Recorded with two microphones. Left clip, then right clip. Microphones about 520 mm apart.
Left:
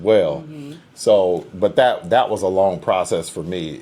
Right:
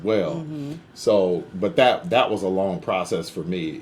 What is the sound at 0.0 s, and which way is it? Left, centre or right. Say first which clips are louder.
Speech: left 7 dB; left.